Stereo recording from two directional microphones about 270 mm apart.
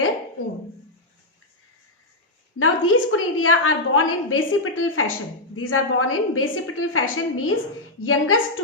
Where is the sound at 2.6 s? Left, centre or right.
Left.